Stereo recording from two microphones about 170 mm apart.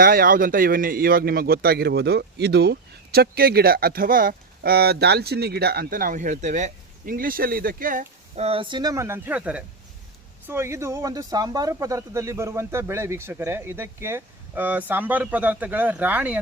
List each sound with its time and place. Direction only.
0.0 s a man's voice: 60° right (ahead or behind)
8.4 s speech: 35° right (ahead or behind); by 16.4 s 10° right (ahead or behind)